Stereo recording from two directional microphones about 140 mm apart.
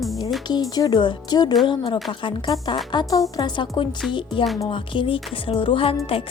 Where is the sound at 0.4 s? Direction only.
30° left (ahead or behind).